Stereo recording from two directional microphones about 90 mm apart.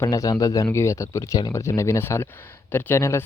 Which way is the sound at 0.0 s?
40° left (ahead or behind).